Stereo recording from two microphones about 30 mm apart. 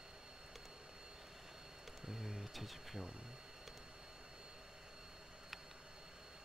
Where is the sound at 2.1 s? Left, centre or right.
Centre.